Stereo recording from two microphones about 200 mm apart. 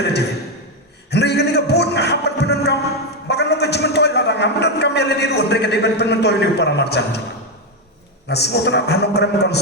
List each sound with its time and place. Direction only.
1.1 s music: 55° left (ahead or behind)
3.2 s a sound: 55° left (ahead or behind)
8.3 s a man's voice: 55° left (ahead or behind)